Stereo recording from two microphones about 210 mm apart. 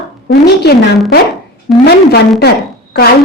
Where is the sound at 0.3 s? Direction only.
50° left (ahead or behind).